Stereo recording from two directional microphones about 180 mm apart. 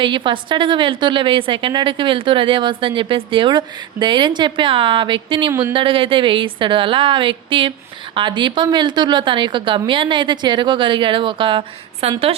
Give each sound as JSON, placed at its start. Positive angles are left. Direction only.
{"t": 0.0, "sound": "a woman's voice", "side_deg": -25}
{"t": 5.5, "sound": "speech", "side_deg": -15}
{"t": 5.7, "sound": "a woman's voice", "side_deg": -30}